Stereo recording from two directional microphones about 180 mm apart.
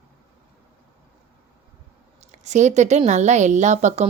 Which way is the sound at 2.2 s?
40° right (ahead or behind).